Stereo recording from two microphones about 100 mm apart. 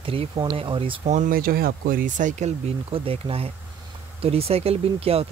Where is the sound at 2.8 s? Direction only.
70° right (ahead or behind).